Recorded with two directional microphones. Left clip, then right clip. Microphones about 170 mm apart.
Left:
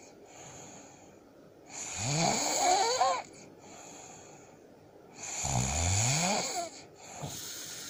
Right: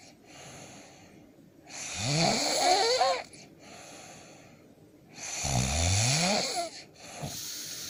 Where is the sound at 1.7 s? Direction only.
25° right (ahead or behind).